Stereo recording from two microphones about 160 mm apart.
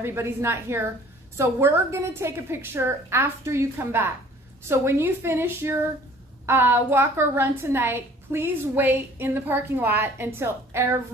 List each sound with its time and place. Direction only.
0.0 s a woman's voice: 15° right (ahead or behind)